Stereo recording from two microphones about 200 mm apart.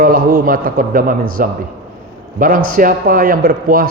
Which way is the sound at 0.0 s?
45° right (ahead or behind).